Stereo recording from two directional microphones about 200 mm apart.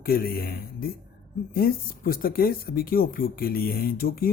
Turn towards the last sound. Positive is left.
turn(degrees=50)  # may be behind; listen again after turning